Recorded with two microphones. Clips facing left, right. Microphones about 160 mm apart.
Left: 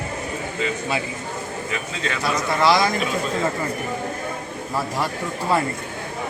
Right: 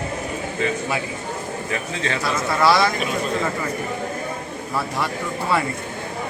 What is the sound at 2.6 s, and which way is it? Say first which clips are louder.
Speech: right 1 dB; 20° left (ahead or behind).